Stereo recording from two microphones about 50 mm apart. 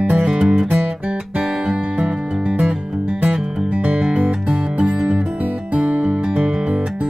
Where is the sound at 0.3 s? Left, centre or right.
Centre.